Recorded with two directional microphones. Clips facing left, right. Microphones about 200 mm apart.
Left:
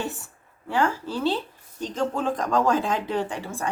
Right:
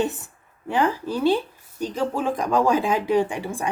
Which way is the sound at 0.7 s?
15° right (ahead or behind).